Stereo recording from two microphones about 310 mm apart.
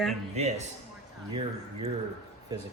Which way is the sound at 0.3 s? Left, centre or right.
Right.